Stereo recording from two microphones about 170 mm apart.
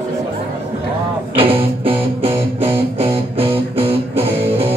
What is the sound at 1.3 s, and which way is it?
Music, 30° right (ahead or behind).